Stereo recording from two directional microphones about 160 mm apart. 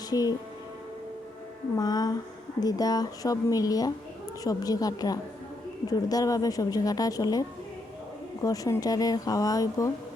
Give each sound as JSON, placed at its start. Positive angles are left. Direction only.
{"t": 0.1, "sound": "speech", "side_deg": 25}
{"t": 1.7, "sound": "speech", "side_deg": 25}